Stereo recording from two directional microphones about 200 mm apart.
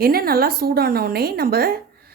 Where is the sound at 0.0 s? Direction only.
50° right (ahead or behind).